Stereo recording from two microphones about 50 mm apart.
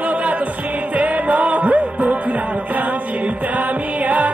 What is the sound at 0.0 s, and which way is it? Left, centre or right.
Music, right.